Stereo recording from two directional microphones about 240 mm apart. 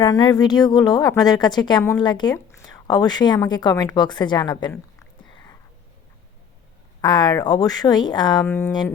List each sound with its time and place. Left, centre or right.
0.0 s a woman's voice: centre
7.0 s a woman's voice: centre